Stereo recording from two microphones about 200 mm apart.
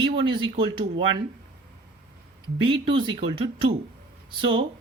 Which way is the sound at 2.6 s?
25° right (ahead or behind).